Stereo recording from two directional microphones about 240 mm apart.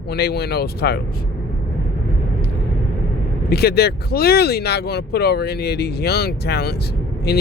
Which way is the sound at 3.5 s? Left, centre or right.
Left.